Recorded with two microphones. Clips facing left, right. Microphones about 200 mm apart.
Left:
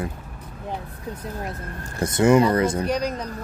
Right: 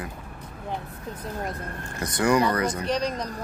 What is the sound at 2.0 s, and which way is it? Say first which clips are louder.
Speech: left 5 dB; 25° left (ahead or behind).